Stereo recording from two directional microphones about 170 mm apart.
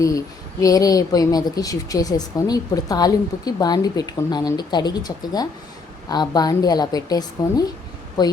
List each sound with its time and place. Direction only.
0.6 s speech: 20° left (ahead or behind)